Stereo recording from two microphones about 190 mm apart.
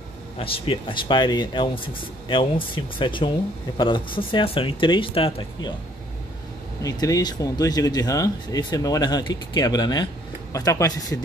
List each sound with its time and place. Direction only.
0.4 s speech: 30° left (ahead or behind)
6.8 s speech: 20° left (ahead or behind)